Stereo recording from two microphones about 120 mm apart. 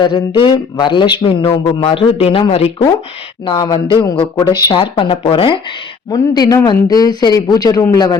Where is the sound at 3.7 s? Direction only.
40° left (ahead or behind).